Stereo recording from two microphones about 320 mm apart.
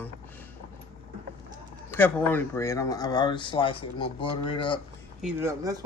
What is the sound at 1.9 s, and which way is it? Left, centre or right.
Speech, centre.